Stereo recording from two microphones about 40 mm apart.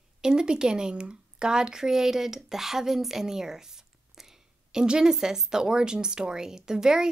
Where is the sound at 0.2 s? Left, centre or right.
Centre.